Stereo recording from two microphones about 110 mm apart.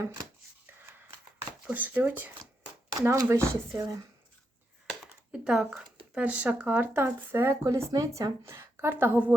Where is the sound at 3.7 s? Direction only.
30° right (ahead or behind).